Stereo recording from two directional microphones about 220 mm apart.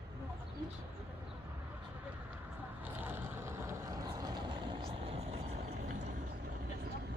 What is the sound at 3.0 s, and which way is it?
Vehicle, 10° right (ahead or behind).